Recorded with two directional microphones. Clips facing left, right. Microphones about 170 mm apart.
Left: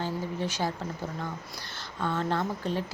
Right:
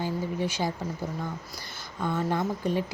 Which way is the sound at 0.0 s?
10° right (ahead or behind).